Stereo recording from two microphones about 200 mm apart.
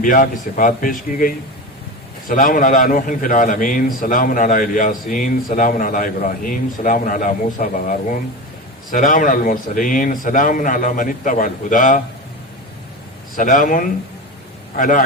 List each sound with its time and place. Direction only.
0.0 s a man's voice: 40° left (ahead or behind)
13.3 s a man's voice: 40° left (ahead or behind)